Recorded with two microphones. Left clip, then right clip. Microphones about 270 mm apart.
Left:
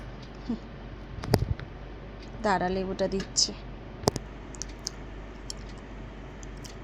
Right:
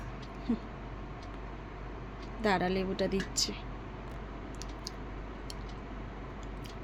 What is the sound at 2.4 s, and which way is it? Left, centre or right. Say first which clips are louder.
A woman's voice: left 3 dB; centre.